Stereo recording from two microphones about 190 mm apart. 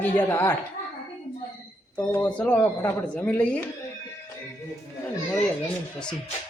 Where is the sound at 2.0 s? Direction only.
10° left (ahead or behind).